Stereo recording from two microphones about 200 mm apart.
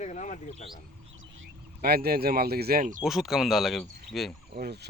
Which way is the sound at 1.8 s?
50° right (ahead or behind).